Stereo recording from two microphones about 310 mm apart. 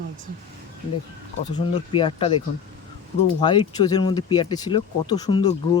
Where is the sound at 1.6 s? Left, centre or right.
Centre.